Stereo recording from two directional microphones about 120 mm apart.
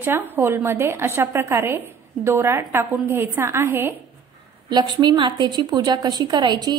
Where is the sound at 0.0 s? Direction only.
20° right (ahead or behind).